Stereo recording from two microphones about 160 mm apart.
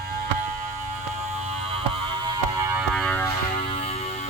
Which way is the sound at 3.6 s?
35° left (ahead or behind).